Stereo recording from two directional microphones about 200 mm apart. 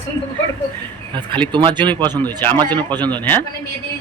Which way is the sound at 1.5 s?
25° right (ahead or behind).